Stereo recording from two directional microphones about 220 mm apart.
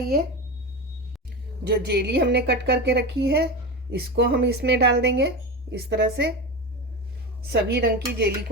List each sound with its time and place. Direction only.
1.6 s a woman's voice: 50° right (ahead or behind)
7.5 s a woman's voice: 45° right (ahead or behind)